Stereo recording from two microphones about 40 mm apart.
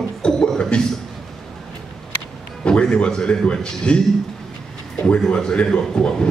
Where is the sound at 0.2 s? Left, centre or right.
Left.